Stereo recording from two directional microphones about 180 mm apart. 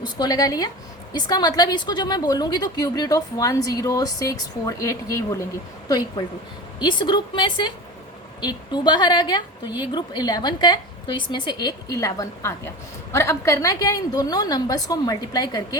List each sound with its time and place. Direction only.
0.0 s a woman's voice: 20° left (ahead or behind)